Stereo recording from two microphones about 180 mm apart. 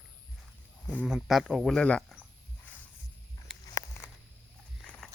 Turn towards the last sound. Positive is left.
turn(degrees=5)  # may be behind; listen again after turning